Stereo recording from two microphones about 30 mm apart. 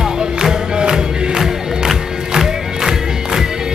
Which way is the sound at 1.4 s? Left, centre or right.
Centre.